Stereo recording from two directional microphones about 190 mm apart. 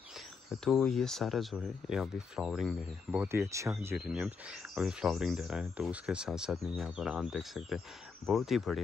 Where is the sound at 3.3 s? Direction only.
15° right (ahead or behind).